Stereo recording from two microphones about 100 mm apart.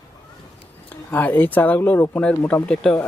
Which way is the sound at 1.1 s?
20° left (ahead or behind).